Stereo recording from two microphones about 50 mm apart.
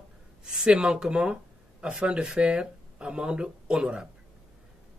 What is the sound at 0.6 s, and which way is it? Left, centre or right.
Speech, centre.